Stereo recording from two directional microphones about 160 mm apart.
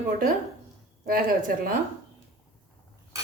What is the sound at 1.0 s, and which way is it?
Speech, 60° right (ahead or behind).